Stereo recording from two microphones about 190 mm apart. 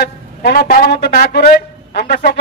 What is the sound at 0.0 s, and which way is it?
Speech, 60° left (ahead or behind).